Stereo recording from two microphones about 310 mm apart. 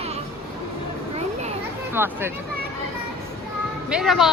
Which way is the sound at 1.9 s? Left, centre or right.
Centre.